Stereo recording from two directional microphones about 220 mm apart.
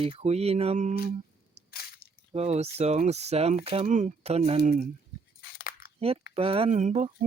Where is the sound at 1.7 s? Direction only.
45° left (ahead or behind).